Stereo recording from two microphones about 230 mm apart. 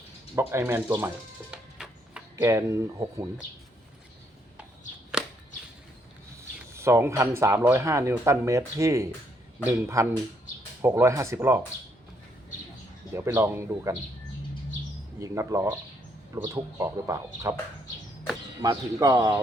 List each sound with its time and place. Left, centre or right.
0.3 s speech: centre
6.3 s speech: centre
13.1 s speech: centre
15.2 s speech: centre
18.6 s speech: centre